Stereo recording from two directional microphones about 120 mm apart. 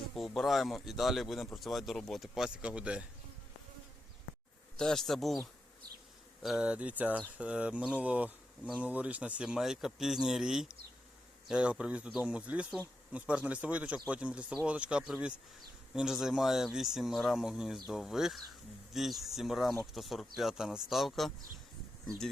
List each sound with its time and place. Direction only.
0.3 s speech: centre (ahead or behind)
4.8 s speech: 5° left (ahead or behind)
6.4 s speech: 5° right (ahead or behind)